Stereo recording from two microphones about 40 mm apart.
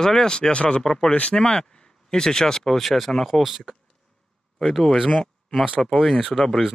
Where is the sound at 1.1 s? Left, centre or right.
Left; by 3.6 s centre.